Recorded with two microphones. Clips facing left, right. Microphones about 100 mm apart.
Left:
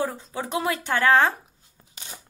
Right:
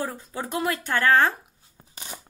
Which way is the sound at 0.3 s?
20° left (ahead or behind).